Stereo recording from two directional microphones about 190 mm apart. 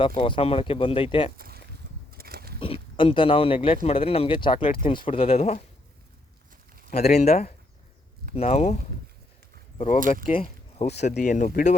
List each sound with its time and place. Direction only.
0.0 s speech: 30° left (ahead or behind)
2.0 s a sound: 50° right (ahead or behind)
2.6 s speech: 30° left (ahead or behind)
6.9 s speech: 35° left (ahead or behind)
10.4 s a sound: 35° left (ahead or behind)
11.1 s speech: 40° left (ahead or behind)